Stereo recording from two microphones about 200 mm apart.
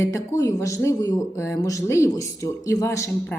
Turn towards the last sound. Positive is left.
turn(degrees=15)  # may be behind; listen again after turning